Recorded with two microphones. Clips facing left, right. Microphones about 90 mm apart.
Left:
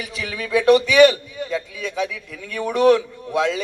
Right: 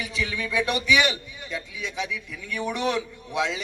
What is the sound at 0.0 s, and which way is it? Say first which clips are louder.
Speech: even; 35° left (ahead or behind).